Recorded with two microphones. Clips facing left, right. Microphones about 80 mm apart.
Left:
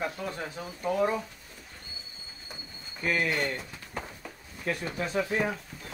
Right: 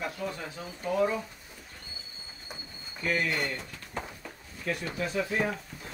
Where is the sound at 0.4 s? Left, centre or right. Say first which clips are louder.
Left 3 dB; left.